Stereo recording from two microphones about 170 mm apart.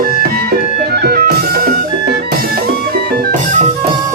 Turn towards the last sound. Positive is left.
turn(degrees=-65)  # may be behind; listen again after turning